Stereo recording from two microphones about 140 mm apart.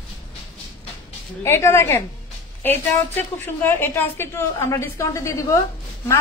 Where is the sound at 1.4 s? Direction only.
20° left (ahead or behind).